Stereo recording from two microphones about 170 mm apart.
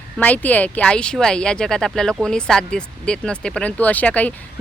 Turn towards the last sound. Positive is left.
turn(degrees=10)  # may be behind; listen again after turning